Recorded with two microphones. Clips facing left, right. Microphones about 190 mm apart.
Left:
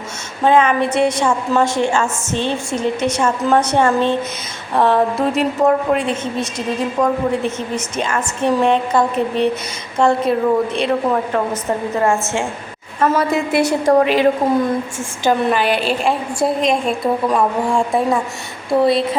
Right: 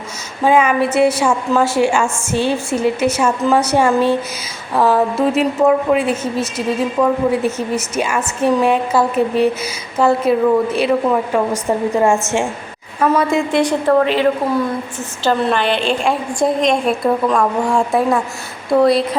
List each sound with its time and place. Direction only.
0.4 s a woman's voice: 10° right (ahead or behind)
13.0 s a woman's voice: 5° left (ahead or behind)